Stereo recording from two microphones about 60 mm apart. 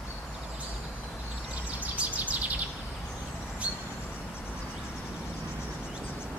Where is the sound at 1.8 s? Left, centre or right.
Right.